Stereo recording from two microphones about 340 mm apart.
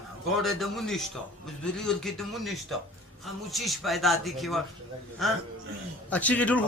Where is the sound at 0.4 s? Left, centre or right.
Centre.